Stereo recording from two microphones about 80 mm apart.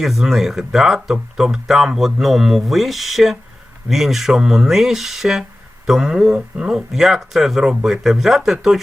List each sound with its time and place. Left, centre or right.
0.0 s speech: centre